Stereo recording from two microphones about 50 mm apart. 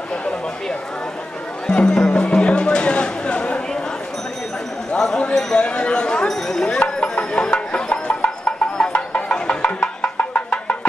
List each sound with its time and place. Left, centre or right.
1.7 s music: centre
4.9 s a sound: centre
9.3 s music: left